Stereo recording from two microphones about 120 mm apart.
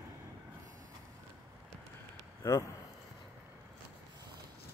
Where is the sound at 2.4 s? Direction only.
20° left (ahead or behind).